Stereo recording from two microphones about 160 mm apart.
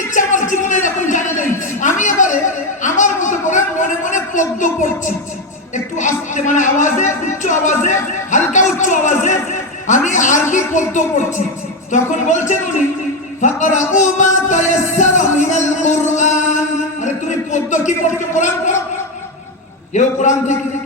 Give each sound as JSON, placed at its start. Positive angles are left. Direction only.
{"t": 0.1, "sound": "a sound", "side_deg": 50}
{"t": 5.7, "sound": "speech", "side_deg": 50}
{"t": 19.9, "sound": "speech", "side_deg": 50}